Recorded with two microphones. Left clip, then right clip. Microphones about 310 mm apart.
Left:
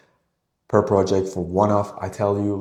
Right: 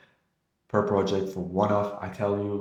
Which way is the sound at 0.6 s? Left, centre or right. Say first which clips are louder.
Left 7 dB; left.